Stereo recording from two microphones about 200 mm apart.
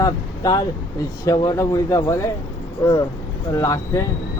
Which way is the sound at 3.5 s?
15° left (ahead or behind).